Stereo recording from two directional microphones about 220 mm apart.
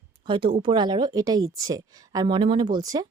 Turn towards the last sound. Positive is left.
turn(degrees=-15)  # may be behind; listen again after turning